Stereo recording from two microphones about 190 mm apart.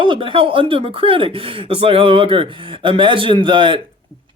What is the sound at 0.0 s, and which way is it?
Speech, 25° right (ahead or behind).